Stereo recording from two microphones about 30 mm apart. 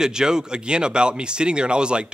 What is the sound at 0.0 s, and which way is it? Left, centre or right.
Speech, right.